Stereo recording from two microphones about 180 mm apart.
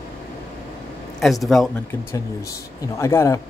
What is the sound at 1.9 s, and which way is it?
Speech, 20° left (ahead or behind).